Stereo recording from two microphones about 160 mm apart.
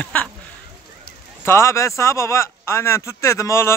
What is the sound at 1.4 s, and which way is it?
Speech, 15° left (ahead or behind).